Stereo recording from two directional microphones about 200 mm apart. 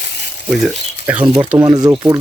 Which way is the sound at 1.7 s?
20° right (ahead or behind).